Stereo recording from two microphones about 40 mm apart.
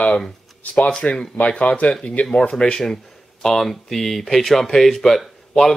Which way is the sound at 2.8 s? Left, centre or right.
Centre.